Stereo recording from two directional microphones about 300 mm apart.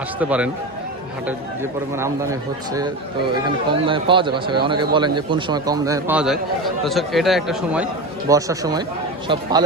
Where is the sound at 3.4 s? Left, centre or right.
Centre.